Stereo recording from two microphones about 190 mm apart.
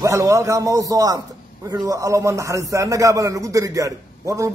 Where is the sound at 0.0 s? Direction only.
15° right (ahead or behind).